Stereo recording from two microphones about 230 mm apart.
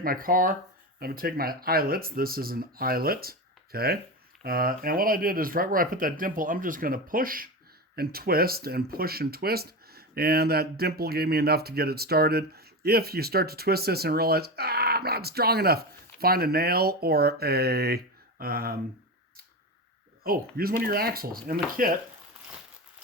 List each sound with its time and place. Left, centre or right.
0.0 s speech: right
20.2 s speech: right